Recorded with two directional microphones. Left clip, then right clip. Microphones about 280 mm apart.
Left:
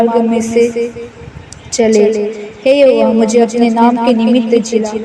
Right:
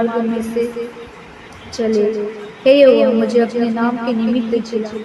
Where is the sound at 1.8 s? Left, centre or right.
Left.